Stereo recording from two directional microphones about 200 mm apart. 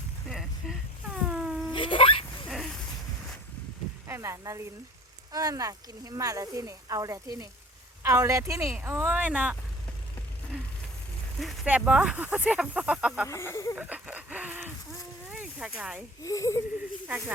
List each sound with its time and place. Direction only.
0.3 s a sound: centre (ahead or behind)
1.7 s a sound: 25° left (ahead or behind)
4.0 s speech: 15° right (ahead or behind)
11.3 s speech: 5° right (ahead or behind)
13.2 s speech: 15° left (ahead or behind)
13.7 s speech: 10° right (ahead or behind)
15.3 s a sound: 5° right (ahead or behind)
16.2 s speech: 15° left (ahead or behind)
17.1 s speech: 10° right (ahead or behind)